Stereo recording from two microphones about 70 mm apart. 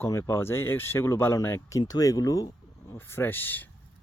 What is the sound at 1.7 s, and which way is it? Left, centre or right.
Speech, left.